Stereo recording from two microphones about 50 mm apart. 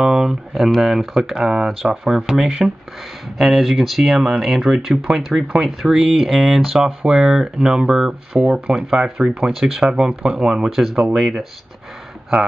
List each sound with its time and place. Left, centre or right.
0.0 s speech: centre
8.3 s speech: right
8.7 s speech: centre
9.6 s speech: centre